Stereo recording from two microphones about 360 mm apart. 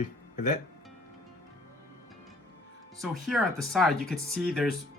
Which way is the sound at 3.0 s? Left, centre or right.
Centre.